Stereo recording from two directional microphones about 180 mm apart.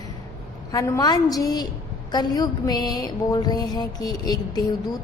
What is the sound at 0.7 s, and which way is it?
Speech, 20° left (ahead or behind).